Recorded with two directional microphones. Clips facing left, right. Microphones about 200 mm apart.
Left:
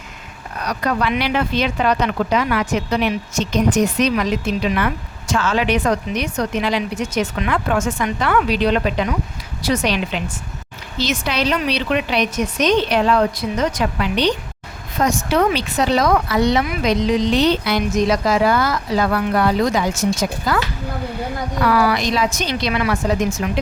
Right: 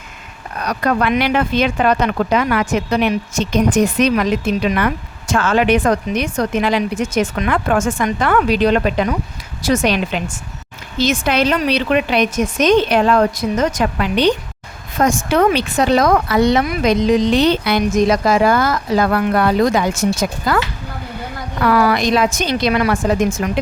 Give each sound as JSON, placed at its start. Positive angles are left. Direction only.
{"t": 0.6, "sound": "speech", "side_deg": -50}
{"t": 21.7, "sound": "speech", "side_deg": -50}